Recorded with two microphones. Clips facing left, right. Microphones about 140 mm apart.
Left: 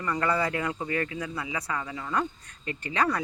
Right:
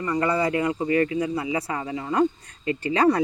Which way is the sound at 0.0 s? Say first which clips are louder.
Right 4 dB; 15° right (ahead or behind).